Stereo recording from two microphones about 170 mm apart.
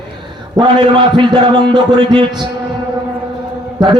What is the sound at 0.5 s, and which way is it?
A man's voice, 25° right (ahead or behind).